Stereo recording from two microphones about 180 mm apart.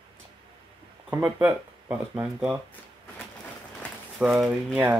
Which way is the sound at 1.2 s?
20° right (ahead or behind).